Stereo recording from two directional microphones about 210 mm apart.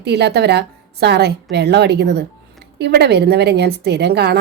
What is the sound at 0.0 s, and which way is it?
A woman's voice, 50° right (ahead or behind).